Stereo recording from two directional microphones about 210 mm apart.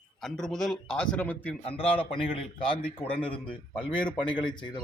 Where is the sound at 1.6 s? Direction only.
25° left (ahead or behind).